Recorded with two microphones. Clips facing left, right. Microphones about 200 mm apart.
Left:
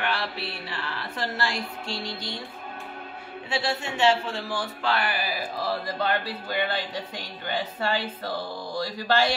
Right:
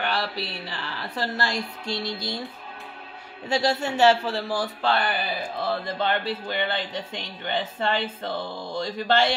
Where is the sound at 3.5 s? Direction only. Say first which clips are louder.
Right 5 dB; 40° right (ahead or behind); by 9.4 s 25° right (ahead or behind).